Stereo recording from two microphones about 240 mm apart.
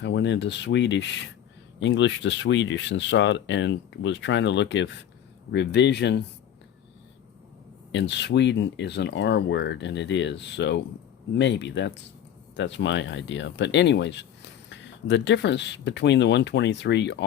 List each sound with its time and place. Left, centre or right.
0.0 s speech: left
7.9 s speech: left